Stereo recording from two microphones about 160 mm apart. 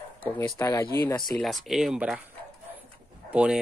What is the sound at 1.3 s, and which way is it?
Speech, centre (ahead or behind).